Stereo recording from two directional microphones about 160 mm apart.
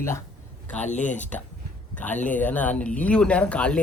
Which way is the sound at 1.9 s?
10° left (ahead or behind).